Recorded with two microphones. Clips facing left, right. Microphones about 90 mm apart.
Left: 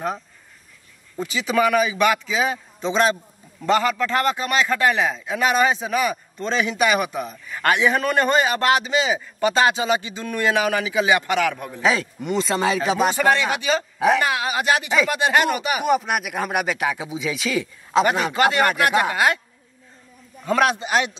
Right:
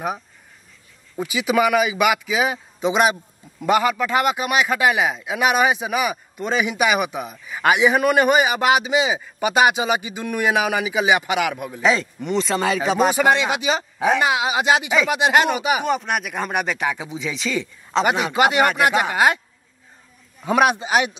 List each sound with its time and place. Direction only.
1.1 s a man's voice: 10° right (ahead or behind)
11.8 s speech: 5° left (ahead or behind)
13.1 s a man's voice: 15° right (ahead or behind)
15.8 s speech: 5° left (ahead or behind)
18.0 s a man's voice: 15° right (ahead or behind)
20.4 s a man's voice: 15° right (ahead or behind)